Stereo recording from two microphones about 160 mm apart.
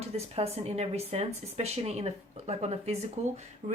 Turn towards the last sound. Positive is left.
turn(degrees=-45)  # may be behind; listen again after turning